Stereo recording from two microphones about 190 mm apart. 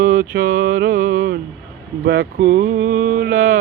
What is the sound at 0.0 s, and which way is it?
Speech, 50° right (ahead or behind).